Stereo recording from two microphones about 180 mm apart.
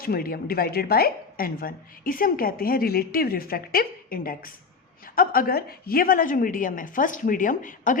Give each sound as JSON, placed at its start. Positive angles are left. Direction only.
{"t": 0.0, "sound": "a woman's voice", "side_deg": 55}